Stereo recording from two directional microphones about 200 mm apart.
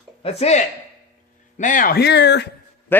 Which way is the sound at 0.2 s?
30° left (ahead or behind).